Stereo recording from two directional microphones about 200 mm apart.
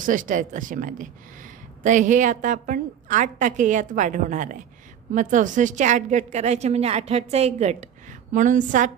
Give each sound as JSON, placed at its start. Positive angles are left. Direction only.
{"t": 0.0, "sound": "a woman's voice", "side_deg": -40}